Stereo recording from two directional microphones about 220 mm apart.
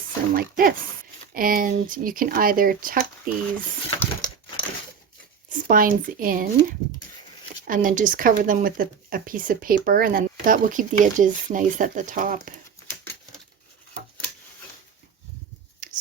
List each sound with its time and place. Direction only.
0.3 s speech: 40° right (ahead or behind)
4.0 s a sound: 20° left (ahead or behind)
5.5 s speech: 40° right (ahead or behind)
15.8 s rub: 35° right (ahead or behind)